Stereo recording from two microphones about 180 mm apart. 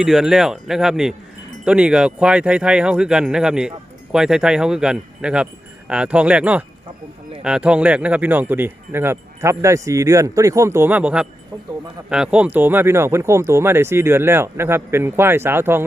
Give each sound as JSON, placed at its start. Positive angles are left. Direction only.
{"t": 0.0, "sound": "speech", "side_deg": 0}